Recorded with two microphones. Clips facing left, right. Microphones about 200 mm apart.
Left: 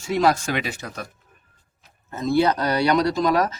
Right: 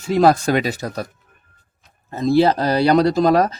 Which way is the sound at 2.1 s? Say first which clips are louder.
Right 4 dB; 30° right (ahead or behind).